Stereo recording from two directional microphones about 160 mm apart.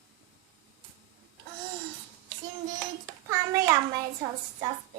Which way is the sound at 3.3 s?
20° right (ahead or behind).